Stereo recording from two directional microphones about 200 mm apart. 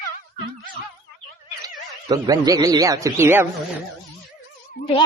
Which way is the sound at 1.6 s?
20° right (ahead or behind).